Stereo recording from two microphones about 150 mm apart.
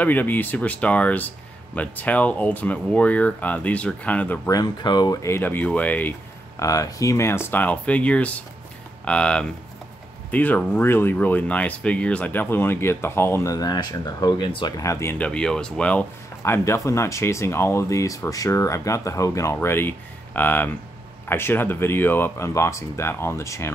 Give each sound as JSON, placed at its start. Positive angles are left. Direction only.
{"t": 0.0, "sound": "speech", "side_deg": 10}
{"t": 4.5, "sound": "speech", "side_deg": 25}